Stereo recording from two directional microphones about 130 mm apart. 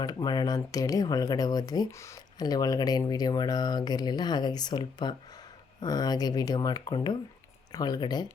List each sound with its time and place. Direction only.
0.0 s speech: 30° left (ahead or behind)